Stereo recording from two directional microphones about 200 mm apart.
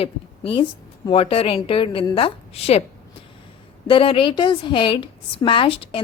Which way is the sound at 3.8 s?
25° left (ahead or behind).